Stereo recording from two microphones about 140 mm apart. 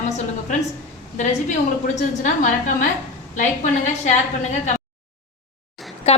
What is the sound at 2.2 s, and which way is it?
Speech, 65° left (ahead or behind).